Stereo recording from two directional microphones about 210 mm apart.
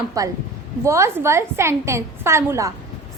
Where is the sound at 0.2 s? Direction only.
15° right (ahead or behind).